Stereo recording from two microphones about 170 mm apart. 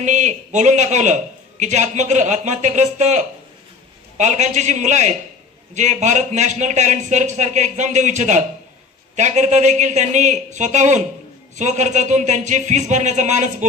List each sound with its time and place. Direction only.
0.0 s a man's voice: 45° right (ahead or behind)